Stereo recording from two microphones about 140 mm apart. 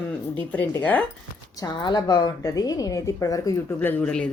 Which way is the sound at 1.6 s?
30° left (ahead or behind).